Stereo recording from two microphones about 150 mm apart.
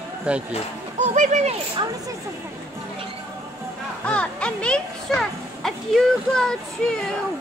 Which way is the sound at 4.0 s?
5° left (ahead or behind).